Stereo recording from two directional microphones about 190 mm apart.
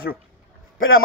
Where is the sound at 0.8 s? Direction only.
90° left.